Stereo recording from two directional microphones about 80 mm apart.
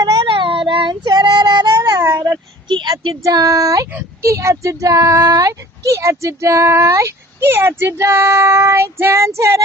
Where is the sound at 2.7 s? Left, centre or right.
Right.